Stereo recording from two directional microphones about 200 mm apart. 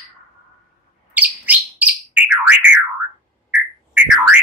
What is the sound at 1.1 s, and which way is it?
Bird, 5° right (ahead or behind).